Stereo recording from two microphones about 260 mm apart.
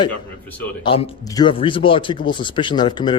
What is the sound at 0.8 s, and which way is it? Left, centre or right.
Speech, centre.